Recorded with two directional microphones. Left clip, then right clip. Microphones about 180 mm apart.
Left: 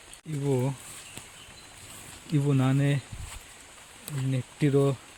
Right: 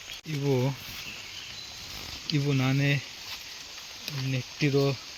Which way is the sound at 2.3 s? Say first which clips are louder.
Left 1 dB; 20° left (ahead or behind).